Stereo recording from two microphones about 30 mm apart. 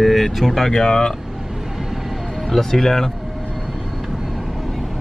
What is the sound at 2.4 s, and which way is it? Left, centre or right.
Speech, centre.